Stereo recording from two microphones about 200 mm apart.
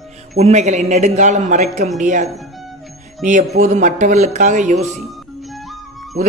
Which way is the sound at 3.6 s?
35° right (ahead or behind).